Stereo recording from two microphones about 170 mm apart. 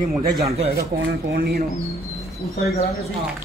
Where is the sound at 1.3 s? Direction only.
65° right (ahead or behind).